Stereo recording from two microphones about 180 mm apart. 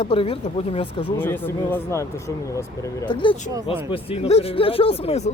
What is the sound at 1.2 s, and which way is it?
Speech, 10° left (ahead or behind).